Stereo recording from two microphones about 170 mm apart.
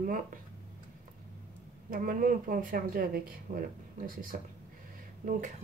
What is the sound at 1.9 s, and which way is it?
Speech, 55° right (ahead or behind).